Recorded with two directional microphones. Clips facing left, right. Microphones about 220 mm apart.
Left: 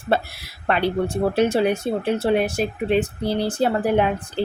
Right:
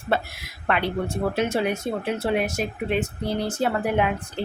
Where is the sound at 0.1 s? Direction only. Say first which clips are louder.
Left 3 dB; 35° left (ahead or behind).